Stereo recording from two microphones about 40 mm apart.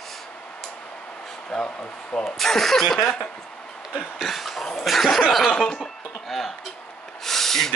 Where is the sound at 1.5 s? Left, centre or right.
Centre.